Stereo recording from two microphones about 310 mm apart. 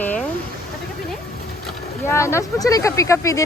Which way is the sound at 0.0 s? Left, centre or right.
Centre.